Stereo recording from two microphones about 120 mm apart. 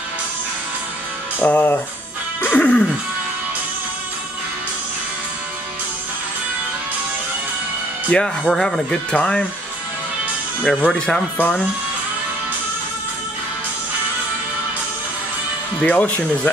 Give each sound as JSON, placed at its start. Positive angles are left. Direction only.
{"t": 1.4, "sound": "speech", "side_deg": 15}
{"t": 2.4, "sound": "music", "side_deg": 10}
{"t": 8.1, "sound": "speech", "side_deg": 5}
{"t": 10.6, "sound": "speech", "side_deg": 10}
{"t": 15.8, "sound": "speech", "side_deg": 10}